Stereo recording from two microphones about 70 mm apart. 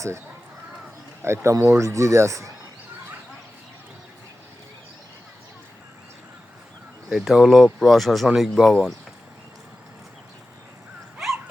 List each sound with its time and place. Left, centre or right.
1.2 s speech: right
7.1 s speech: centre
11.2 s dog: centre